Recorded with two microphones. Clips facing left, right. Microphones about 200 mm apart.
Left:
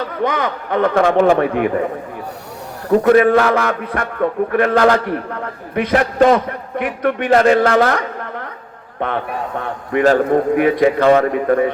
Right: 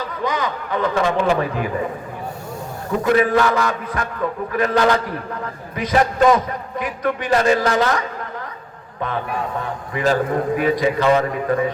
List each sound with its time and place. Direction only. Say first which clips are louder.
0.2 s a man's voice: left 4 dB; 60° left (ahead or behind)
3.0 s a man's voice: left 4 dB; 60° left (ahead or behind)